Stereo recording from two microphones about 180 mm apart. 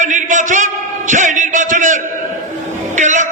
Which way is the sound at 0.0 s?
45° right (ahead or behind).